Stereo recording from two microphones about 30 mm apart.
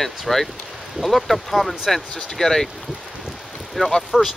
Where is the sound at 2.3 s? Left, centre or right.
Centre.